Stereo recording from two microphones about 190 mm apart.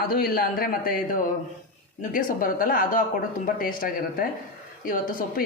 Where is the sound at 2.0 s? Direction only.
45° left (ahead or behind).